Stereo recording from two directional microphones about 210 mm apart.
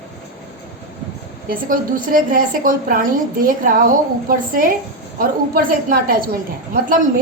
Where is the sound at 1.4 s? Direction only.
40° right (ahead or behind).